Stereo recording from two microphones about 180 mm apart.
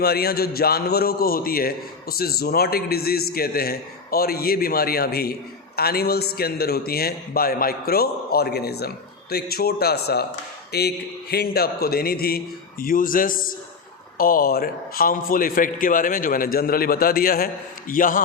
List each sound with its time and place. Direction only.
0.0 s a man's voice: 60° left (ahead or behind)